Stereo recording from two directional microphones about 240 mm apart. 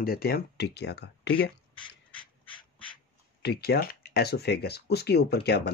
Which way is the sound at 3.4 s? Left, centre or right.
Left.